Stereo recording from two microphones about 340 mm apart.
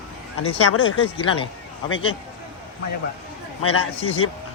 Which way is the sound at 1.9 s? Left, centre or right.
Left.